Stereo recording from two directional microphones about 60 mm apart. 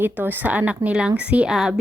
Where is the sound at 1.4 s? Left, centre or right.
Centre.